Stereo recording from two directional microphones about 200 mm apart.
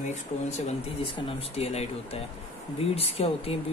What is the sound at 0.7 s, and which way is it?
Speech, 25° left (ahead or behind).